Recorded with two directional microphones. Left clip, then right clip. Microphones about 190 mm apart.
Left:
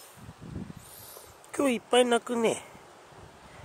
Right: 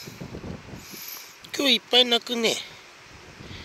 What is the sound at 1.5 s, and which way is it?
Speech, centre (ahead or behind).